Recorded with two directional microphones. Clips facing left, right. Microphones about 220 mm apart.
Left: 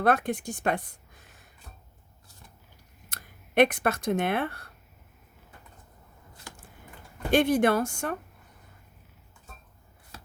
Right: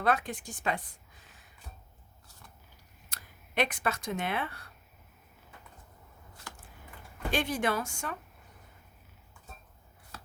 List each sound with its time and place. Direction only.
0.0 s speech: 55° left (ahead or behind)
3.1 s speech: 55° left (ahead or behind)
7.3 s speech: 60° left (ahead or behind)